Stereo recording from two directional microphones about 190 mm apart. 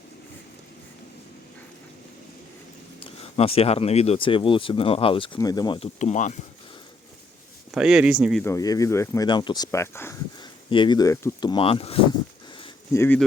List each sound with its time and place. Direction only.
3.2 s speech: 30° left (ahead or behind)
6.0 s speech: 40° left (ahead or behind)
7.7 s speech: 5° right (ahead or behind)
8.4 s speech: 20° left (ahead or behind)
10.7 s speech: 25° left (ahead or behind)
12.9 s speech: 15° left (ahead or behind)